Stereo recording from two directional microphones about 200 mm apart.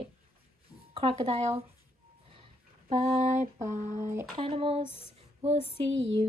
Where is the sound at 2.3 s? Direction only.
30° right (ahead or behind).